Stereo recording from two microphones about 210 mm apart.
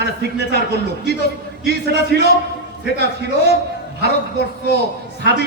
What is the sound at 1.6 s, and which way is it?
Speech, 50° right (ahead or behind).